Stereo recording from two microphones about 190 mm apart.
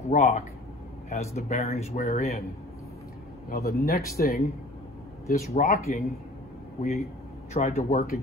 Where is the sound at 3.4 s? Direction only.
55° left (ahead or behind).